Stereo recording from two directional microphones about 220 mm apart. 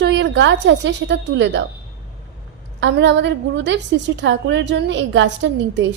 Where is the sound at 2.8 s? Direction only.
55° right (ahead or behind).